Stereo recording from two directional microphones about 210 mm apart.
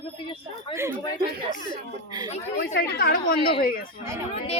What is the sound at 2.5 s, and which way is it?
A woman's voice, 50° left (ahead or behind).